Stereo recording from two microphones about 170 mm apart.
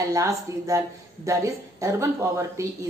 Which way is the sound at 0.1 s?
20° right (ahead or behind).